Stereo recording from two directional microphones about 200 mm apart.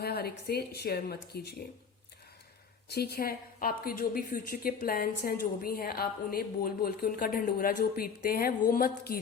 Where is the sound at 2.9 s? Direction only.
50° left (ahead or behind).